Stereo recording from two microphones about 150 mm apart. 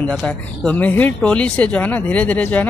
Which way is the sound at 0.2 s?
10° left (ahead or behind).